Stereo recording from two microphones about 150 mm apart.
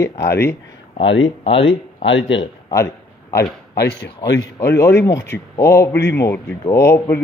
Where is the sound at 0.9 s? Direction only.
40° left (ahead or behind).